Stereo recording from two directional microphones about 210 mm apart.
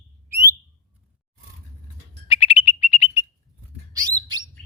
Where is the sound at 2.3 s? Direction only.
25° left (ahead or behind).